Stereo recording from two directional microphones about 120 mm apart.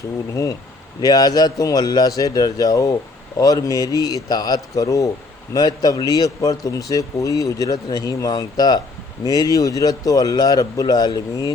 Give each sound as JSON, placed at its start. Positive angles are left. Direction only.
{"t": 1.0, "sound": "speech", "side_deg": 35}